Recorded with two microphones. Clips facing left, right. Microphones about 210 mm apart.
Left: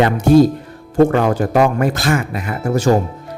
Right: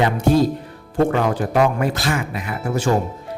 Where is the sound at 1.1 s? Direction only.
50° left (ahead or behind).